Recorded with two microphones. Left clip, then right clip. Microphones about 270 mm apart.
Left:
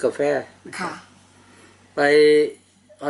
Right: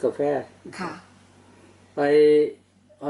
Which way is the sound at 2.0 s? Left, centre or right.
Centre.